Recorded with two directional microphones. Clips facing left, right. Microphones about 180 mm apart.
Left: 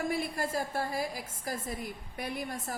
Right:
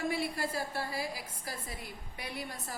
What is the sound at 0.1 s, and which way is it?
A woman's voice, 50° left (ahead or behind).